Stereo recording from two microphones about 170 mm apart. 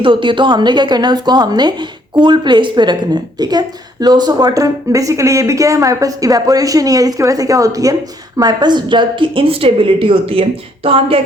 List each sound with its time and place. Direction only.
0.0 s speech: 30° right (ahead or behind)